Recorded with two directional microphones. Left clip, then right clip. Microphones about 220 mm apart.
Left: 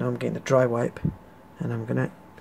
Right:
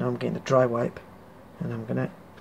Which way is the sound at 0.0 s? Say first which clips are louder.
Left 1 dB; 10° left (ahead or behind).